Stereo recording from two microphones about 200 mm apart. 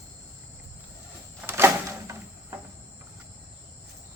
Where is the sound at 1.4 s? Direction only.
10° right (ahead or behind).